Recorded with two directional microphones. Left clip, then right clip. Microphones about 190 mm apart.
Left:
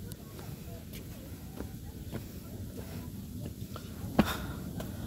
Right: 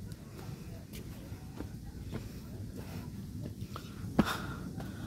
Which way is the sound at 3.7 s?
15° right (ahead or behind).